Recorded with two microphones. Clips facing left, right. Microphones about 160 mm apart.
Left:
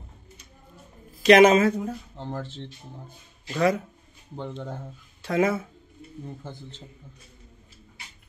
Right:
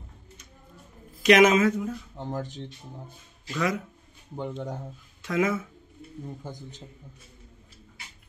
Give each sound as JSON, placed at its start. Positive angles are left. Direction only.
{"t": 1.2, "sound": "speech", "side_deg": 30}
{"t": 2.1, "sound": "speech", "side_deg": -15}
{"t": 3.5, "sound": "speech", "side_deg": 35}
{"t": 4.4, "sound": "speech", "side_deg": -10}
{"t": 5.2, "sound": "speech", "side_deg": 35}
{"t": 6.2, "sound": "speech", "side_deg": -15}